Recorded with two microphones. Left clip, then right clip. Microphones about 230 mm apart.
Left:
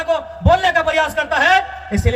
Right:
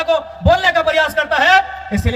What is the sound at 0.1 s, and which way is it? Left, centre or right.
A man's voice, centre.